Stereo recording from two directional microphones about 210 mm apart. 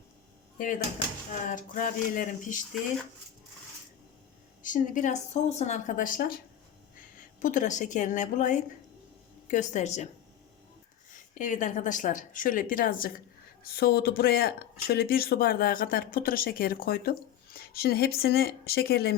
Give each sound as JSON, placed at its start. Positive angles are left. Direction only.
{"t": 1.3, "sound": "a woman's voice", "side_deg": 40}
{"t": 4.6, "sound": "a woman's voice", "side_deg": 40}
{"t": 7.4, "sound": "a woman's voice", "side_deg": 35}
{"t": 11.1, "sound": "a woman's voice", "side_deg": 35}